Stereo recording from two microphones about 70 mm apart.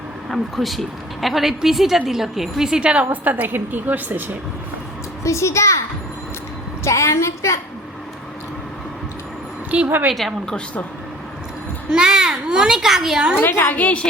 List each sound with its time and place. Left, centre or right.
0.3 s a woman's voice: centre; by 4.2 s right
5.2 s a woman's voice: left
6.8 s a woman's voice: left
9.7 s speech: centre
10.2 s a woman's voice: centre
11.9 s a child's voice: centre
13.4 s a woman's voice: left